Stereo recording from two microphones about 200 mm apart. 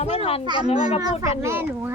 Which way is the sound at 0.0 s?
30° left (ahead or behind).